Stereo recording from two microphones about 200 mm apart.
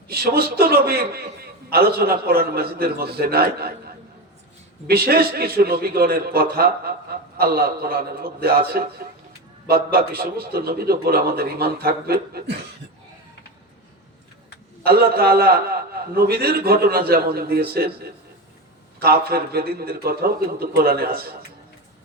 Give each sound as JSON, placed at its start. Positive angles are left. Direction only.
{"t": 0.1, "sound": "a man's voice", "side_deg": -50}
{"t": 14.8, "sound": "a man's voice", "side_deg": -50}
{"t": 18.9, "sound": "a man's voice", "side_deg": -50}